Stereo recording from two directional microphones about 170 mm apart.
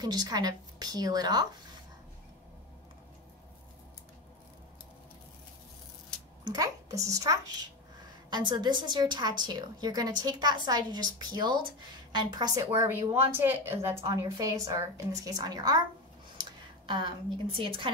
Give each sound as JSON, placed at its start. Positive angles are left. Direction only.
{"t": 0.0, "sound": "a woman's voice", "side_deg": -25}
{"t": 6.4, "sound": "a woman's voice", "side_deg": -20}
{"t": 12.7, "sound": "a woman's voice", "side_deg": -15}
{"t": 16.3, "sound": "a sound", "side_deg": -30}
{"t": 17.6, "sound": "a woman's voice", "side_deg": -30}